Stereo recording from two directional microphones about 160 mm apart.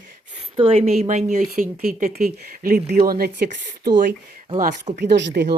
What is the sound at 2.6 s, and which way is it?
Speech, 55° right (ahead or behind).